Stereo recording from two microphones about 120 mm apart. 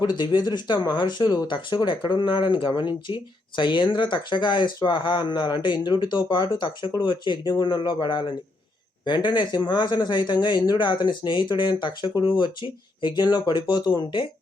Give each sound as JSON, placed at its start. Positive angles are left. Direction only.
{"t": 0.0, "sound": "speech", "side_deg": 35}